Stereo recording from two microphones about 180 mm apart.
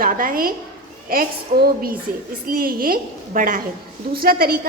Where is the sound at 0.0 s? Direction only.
50° right (ahead or behind).